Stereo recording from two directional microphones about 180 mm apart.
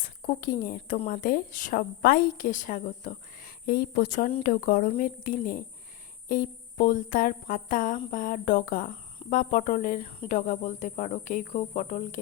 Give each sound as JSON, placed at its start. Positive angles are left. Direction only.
{"t": 0.0, "sound": "a woman's voice", "side_deg": 55}